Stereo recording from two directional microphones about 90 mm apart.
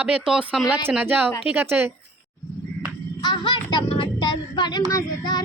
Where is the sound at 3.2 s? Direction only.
60° left (ahead or behind).